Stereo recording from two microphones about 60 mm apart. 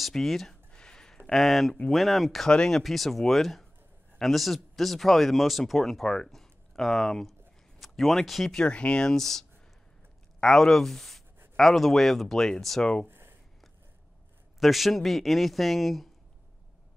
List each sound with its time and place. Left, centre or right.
0.0 s speech: centre
0.7 s a sound: centre
1.9 s speech: centre
2.5 s speech: centre
6.0 s speech: centre
6.3 s speech: centre
8.5 s speech: centre
13.1 s a sound: right
14.6 s speech: centre